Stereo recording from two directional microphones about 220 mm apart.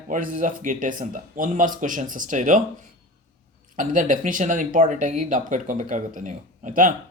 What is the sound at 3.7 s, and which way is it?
Speech, 35° right (ahead or behind).